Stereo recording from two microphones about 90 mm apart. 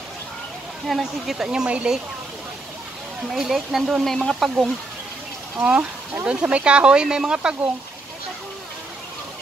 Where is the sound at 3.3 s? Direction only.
5° right (ahead or behind).